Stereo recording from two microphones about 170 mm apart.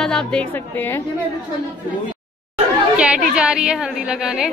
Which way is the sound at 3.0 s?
5° right (ahead or behind).